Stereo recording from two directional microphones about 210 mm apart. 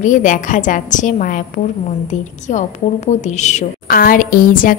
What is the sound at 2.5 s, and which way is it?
A woman's voice, 35° left (ahead or behind).